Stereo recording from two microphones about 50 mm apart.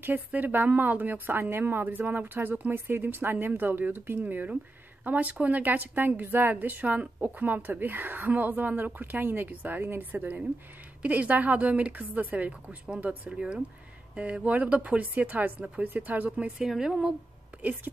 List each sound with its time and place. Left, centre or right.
0.3 s speech: right
9.5 s speech: right
16.5 s a woman's voice: centre